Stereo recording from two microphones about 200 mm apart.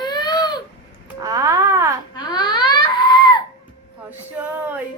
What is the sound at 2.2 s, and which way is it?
Crying, 20° left (ahead or behind).